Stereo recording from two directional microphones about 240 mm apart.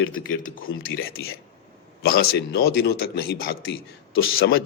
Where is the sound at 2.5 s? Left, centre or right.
Left.